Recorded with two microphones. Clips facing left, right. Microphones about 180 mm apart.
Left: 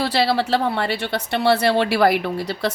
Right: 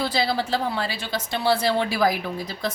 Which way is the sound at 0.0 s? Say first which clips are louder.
Left 4 dB; 70° left (ahead or behind).